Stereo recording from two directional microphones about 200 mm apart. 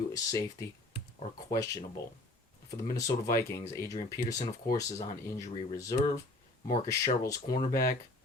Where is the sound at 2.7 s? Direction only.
15° left (ahead or behind).